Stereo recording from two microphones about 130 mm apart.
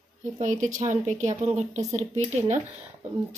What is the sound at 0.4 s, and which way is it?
A woman's voice, 70° right (ahead or behind).